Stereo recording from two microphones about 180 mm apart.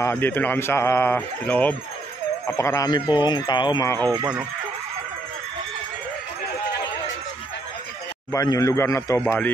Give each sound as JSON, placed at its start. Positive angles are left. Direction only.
{"t": 0.0, "sound": "speech", "side_deg": 10}
{"t": 8.3, "sound": "speech", "side_deg": 20}